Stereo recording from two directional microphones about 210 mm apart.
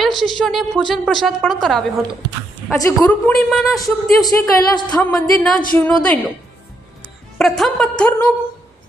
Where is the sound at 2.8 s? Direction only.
10° left (ahead or behind).